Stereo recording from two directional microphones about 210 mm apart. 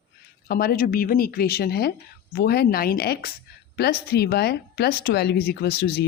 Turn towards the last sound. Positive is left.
turn(degrees=50)  # may be behind; listen again after turning